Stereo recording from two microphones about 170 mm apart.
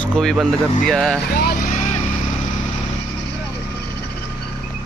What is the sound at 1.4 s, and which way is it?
Vehicle, 60° left (ahead or behind).